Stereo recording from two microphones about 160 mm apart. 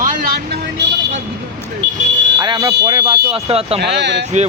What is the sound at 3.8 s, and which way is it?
Speech, 90° right.